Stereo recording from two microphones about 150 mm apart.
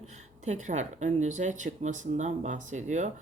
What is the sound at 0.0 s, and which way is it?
Speech, 50° right (ahead or behind).